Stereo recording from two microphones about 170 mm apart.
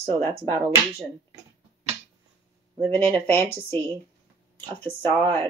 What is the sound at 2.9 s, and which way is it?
Speech, 15° left (ahead or behind).